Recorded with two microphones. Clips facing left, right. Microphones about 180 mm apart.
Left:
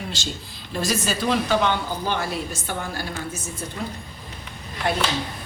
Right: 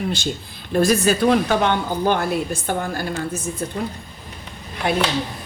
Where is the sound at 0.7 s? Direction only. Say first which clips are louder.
Right 8 dB; 55° right (ahead or behind).